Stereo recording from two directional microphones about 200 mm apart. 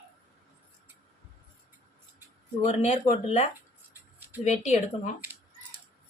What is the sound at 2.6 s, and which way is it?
Speech, 35° left (ahead or behind).